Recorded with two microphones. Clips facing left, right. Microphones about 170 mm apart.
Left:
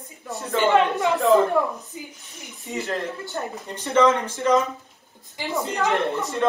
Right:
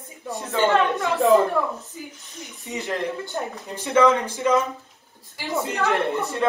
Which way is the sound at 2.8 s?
15° right (ahead or behind).